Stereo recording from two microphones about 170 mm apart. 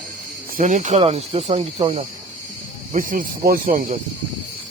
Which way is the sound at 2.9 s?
55° right (ahead or behind).